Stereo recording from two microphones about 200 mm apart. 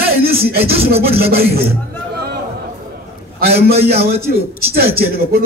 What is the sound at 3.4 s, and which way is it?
A man's voice, 50° right (ahead or behind).